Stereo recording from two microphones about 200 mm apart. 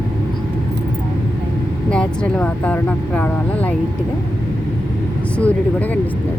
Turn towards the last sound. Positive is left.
turn(degrees=5)  # may be behind; listen again after turning